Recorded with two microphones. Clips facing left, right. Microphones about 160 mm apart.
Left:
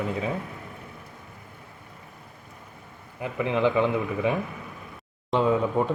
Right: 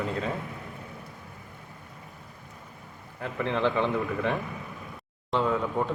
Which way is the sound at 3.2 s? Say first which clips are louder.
Left 3 dB; 10° left (ahead or behind).